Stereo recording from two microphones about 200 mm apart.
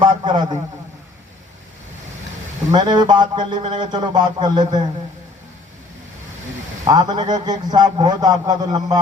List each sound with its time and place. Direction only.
0.0 s a sound: 20° right (ahead or behind)
2.7 s speech: 20° right (ahead or behind)
6.8 s speech: 20° right (ahead or behind)